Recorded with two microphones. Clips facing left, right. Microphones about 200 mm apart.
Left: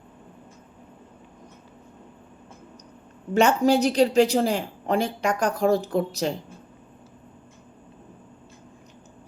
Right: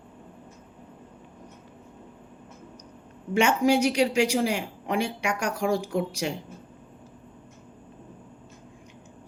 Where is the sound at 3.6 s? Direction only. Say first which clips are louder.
Left 2 dB; 10° right (ahead or behind).